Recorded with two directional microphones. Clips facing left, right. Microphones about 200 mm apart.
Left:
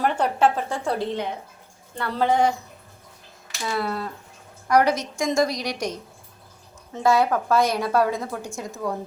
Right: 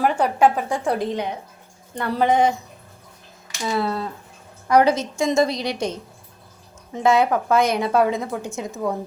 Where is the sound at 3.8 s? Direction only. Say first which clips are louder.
Right 3 dB; 25° right (ahead or behind).